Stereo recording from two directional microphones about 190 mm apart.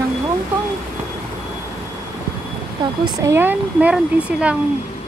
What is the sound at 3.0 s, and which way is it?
Speech, 15° right (ahead or behind).